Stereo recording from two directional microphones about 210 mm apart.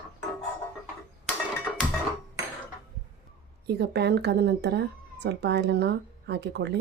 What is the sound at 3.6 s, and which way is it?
Speech, 50° right (ahead or behind).